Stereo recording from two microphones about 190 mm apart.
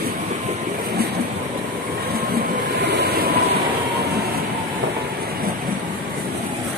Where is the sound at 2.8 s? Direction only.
60° right (ahead or behind).